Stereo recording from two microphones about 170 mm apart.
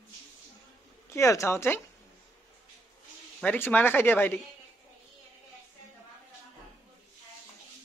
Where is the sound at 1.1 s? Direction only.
15° left (ahead or behind).